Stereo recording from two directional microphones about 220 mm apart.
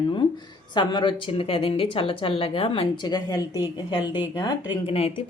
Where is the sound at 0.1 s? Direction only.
20° left (ahead or behind).